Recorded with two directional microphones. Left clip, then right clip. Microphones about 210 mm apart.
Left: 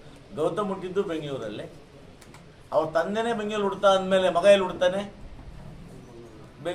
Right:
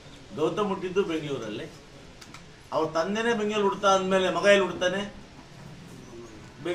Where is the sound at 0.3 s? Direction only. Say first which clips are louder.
Even; 15° left (ahead or behind).